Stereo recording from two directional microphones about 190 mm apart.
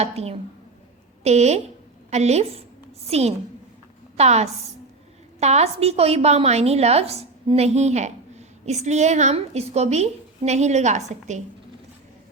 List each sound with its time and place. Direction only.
0.0 s a woman's voice: 30° right (ahead or behind)